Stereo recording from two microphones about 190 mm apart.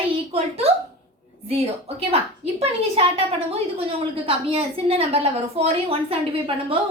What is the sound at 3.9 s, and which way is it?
A woman's voice, 30° right (ahead or behind).